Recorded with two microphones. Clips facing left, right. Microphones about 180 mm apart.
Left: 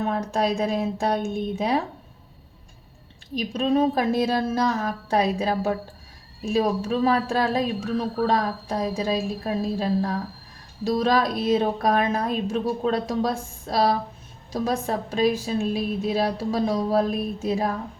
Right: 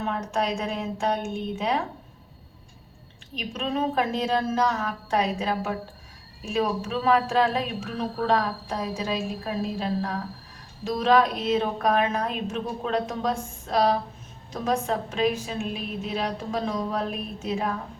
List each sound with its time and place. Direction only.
0.1 s a woman's voice: 35° left (ahead or behind)
3.3 s a woman's voice: 35° left (ahead or behind)